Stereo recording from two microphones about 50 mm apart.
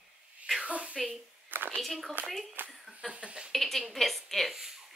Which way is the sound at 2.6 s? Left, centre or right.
Right.